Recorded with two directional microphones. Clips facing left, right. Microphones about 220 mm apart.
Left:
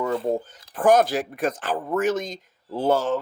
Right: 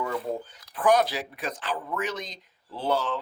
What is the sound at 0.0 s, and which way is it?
Speech, 45° left (ahead or behind).